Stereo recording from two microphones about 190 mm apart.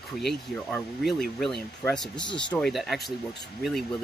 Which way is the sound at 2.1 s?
25° left (ahead or behind).